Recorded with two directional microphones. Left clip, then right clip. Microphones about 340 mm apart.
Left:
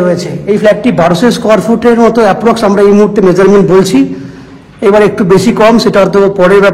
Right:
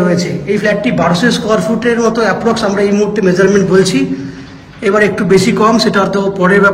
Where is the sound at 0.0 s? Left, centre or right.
Centre.